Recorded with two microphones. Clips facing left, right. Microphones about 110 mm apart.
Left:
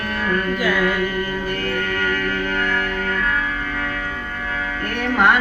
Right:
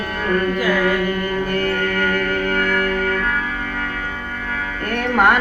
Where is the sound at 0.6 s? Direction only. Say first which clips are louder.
Right 2 dB; 40° right (ahead or behind).